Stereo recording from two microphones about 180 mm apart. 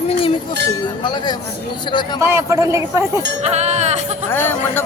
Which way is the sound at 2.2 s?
15° right (ahead or behind).